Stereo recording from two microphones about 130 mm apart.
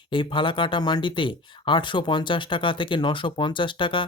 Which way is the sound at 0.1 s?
40° left (ahead or behind).